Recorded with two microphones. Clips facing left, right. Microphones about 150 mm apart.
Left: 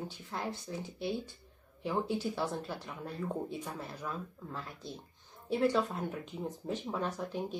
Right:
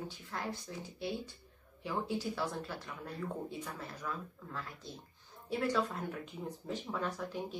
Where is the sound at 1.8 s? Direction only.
20° left (ahead or behind).